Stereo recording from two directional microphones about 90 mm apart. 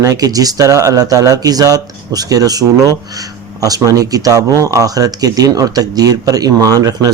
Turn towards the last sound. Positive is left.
turn(degrees=-45)  # may be behind; listen again after turning